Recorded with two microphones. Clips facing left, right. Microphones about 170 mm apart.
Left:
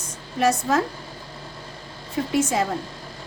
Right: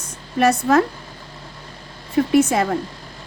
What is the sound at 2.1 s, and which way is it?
Speech, 60° right (ahead or behind).